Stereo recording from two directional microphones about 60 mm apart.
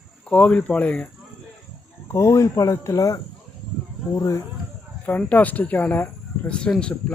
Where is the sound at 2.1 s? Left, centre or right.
Left.